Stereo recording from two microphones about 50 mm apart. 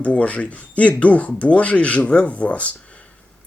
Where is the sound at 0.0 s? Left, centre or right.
Left.